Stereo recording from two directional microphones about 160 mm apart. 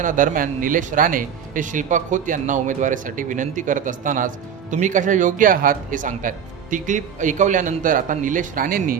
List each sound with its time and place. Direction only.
0.0 s speech: 55° right (ahead or behind)